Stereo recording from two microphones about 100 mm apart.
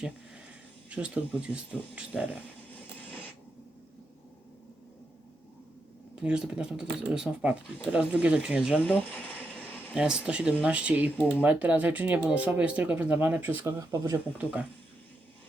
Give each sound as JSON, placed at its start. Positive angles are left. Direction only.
{"t": 0.9, "sound": "speech", "side_deg": -10}
{"t": 6.2, "sound": "speech", "side_deg": -10}
{"t": 13.7, "sound": "speech", "side_deg": -35}